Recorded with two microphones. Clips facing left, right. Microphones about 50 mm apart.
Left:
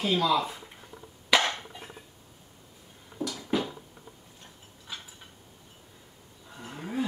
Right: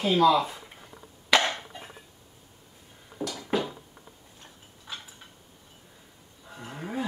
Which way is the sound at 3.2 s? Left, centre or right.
Right.